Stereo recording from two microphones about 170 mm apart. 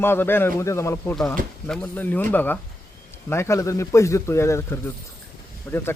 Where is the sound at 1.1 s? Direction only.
5° left (ahead or behind).